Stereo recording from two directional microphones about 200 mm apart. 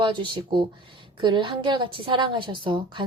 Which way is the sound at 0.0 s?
25° right (ahead or behind).